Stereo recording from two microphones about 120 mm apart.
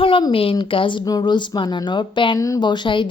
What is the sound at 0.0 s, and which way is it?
A woman's voice, 45° left (ahead or behind).